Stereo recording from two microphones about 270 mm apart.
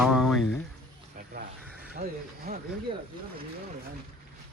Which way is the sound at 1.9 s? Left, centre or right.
Right.